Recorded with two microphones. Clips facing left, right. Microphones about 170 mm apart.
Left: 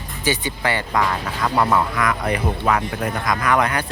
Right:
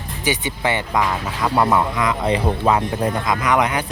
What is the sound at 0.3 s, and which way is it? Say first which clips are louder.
Speech: right 1 dB; 20° right (ahead or behind).